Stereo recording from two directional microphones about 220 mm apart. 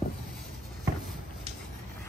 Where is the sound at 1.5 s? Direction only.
30° right (ahead or behind).